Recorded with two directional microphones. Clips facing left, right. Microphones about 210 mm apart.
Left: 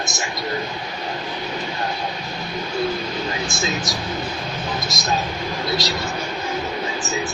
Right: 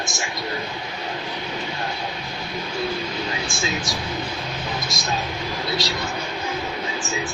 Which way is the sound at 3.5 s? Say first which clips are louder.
Left 2 dB; 40° left (ahead or behind).